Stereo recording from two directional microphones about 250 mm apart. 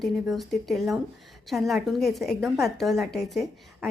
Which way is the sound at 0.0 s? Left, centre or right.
Centre.